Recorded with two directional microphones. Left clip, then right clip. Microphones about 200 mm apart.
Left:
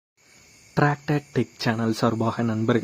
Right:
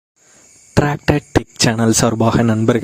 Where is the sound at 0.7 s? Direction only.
50° right (ahead or behind).